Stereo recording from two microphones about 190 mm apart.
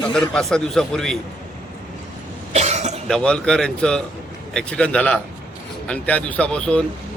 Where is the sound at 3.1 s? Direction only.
5° left (ahead or behind).